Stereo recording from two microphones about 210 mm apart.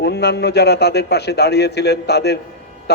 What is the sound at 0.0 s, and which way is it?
A man's voice, 50° left (ahead or behind).